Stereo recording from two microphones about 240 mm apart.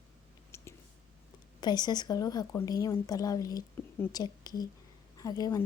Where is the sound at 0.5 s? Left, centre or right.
Centre.